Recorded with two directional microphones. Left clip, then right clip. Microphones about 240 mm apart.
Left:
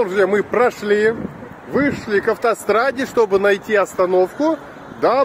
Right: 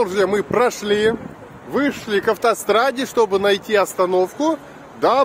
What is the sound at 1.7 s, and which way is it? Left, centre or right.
Speech, centre.